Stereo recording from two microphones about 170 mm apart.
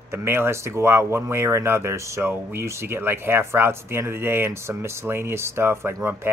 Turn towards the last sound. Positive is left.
turn(degrees=-15)  # may be behind; listen again after turning